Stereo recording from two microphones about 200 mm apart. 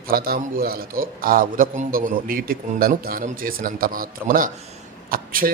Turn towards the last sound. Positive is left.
turn(degrees=-45)  # may be behind; listen again after turning